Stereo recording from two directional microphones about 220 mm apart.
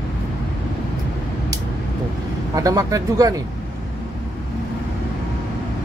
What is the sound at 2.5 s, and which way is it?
Speech, 15° right (ahead or behind).